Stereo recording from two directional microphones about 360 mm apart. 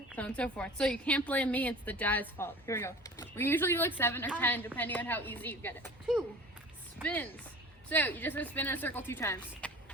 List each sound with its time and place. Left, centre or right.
0.1 s a woman's voice: centre